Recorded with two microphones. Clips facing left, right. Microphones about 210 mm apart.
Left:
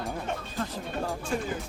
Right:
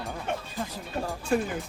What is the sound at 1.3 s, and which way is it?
Speech, 65° right (ahead or behind).